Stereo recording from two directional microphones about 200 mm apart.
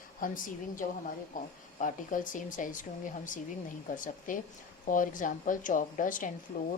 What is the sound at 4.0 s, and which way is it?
A woman's voice, 40° left (ahead or behind).